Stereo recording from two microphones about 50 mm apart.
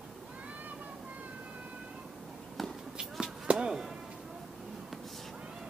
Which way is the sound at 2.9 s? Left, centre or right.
Centre.